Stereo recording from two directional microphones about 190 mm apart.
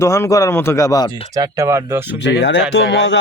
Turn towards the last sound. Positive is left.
turn(degrees=70)  # may be behind; listen again after turning